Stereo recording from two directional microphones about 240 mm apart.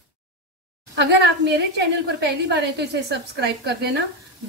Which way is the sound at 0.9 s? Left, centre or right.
Right.